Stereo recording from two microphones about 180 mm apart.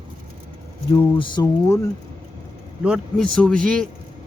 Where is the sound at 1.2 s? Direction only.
25° left (ahead or behind).